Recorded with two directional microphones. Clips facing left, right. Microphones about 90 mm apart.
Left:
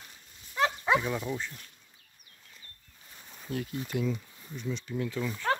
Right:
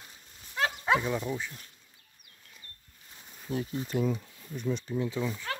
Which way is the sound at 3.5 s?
25° right (ahead or behind).